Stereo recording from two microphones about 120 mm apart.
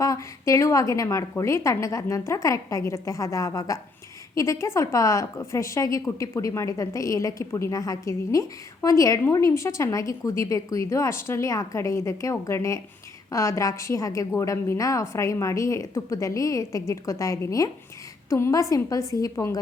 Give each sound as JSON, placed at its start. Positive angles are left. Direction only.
{"t": 0.0, "sound": "a woman's voice", "side_deg": 25}